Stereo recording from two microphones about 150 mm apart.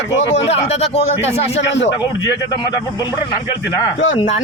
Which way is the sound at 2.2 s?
25° left (ahead or behind).